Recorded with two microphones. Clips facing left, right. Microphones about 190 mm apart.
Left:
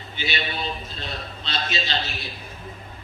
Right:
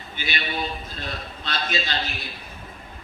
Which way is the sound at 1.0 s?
50° right (ahead or behind).